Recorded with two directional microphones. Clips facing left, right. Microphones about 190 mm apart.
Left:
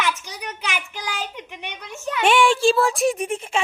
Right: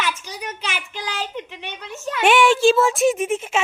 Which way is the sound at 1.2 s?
15° left (ahead or behind).